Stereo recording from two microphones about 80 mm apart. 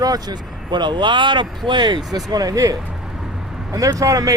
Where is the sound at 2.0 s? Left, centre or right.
Right.